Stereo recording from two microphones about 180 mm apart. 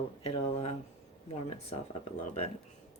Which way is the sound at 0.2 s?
35° left (ahead or behind).